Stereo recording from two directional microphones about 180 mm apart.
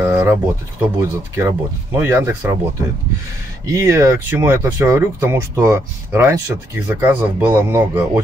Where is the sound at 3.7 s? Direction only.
15° right (ahead or behind).